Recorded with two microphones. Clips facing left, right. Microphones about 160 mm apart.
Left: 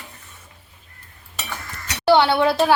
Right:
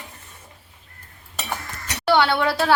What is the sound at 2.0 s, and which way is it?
Speech, 20° left (ahead or behind).